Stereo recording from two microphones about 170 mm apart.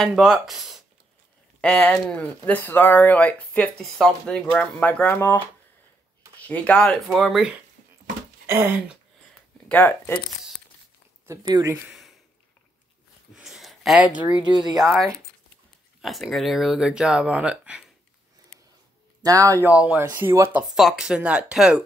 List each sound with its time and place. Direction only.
0.0 s speech: centre (ahead or behind)
6.4 s speech: 5° left (ahead or behind)
8.5 s speech: 15° right (ahead or behind)
9.7 s speech: 10° left (ahead or behind)
11.2 s speech: 20° right (ahead or behind)
11.7 s a sound: centre (ahead or behind)
13.3 s a sound: centre (ahead or behind)
14.4 s speech: 25° right (ahead or behind)
14.8 s speech: centre (ahead or behind)
19.2 s speech: 20° right (ahead or behind)
20.7 s speech: 5° right (ahead or behind)